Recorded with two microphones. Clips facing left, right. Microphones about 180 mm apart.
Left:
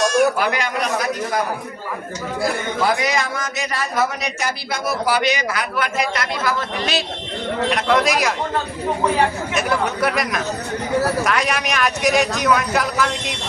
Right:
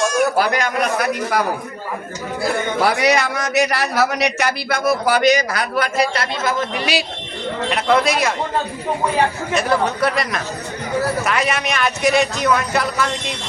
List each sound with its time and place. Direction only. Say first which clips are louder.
0.3 s a man's voice: right 3 dB; 40° right (ahead or behind)
0.9 s a man's voice: right 2 dB; 60° right (ahead or behind)
2.8 s a man's voice: right 3 dB; 70° right (ahead or behind); by 6.2 s 35° right (ahead or behind)
6.4 s a man's voice: right 2 dB; 20° right (ahead or behind); by 8.3 s centre (ahead or behind)
9.6 s a man's voice: right 2 dB; 5° left (ahead or behind)